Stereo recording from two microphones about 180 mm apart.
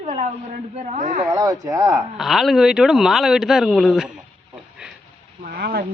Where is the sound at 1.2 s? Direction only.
20° right (ahead or behind).